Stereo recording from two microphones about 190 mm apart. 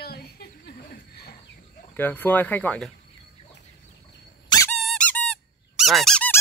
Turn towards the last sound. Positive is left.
turn(degrees=5)  # may be behind; listen again after turning